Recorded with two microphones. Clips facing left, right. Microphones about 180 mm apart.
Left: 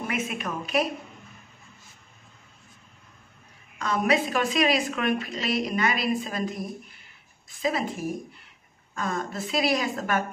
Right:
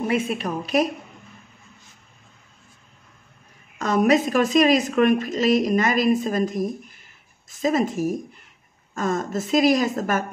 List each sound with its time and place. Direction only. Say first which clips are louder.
0.0 s a woman's voice: right 7 dB; 30° right (ahead or behind)
3.7 s a woman's voice: right 6 dB; 45° right (ahead or behind)